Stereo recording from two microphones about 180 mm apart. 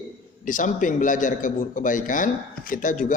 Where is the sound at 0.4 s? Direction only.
45° left (ahead or behind).